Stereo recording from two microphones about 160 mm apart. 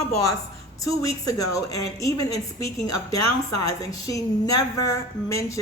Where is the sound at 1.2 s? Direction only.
20° left (ahead or behind).